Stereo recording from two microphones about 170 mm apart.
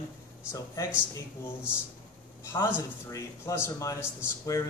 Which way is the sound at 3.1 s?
20° left (ahead or behind).